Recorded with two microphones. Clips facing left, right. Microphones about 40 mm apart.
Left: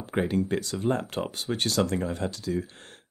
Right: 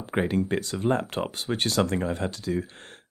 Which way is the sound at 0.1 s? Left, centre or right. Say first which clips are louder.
Right 1 dB; right.